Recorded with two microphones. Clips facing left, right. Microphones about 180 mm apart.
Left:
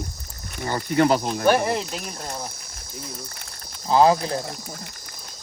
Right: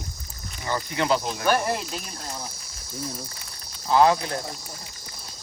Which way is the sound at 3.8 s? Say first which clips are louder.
Left 2 dB; 30° left (ahead or behind).